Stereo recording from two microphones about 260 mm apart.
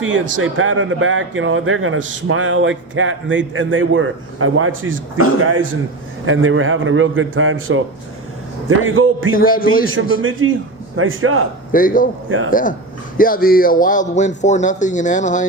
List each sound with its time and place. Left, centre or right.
0.0 s a man's voice: right
6.2 s a man's voice: right
9.3 s a man's voice: left
9.9 s a man's voice: right
11.7 s a man's voice: left
12.3 s a man's voice: right
13.1 s a man's voice: left